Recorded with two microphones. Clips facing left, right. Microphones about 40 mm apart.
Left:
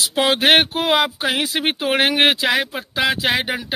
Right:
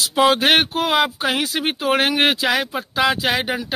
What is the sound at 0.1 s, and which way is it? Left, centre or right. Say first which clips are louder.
Speech: even; centre.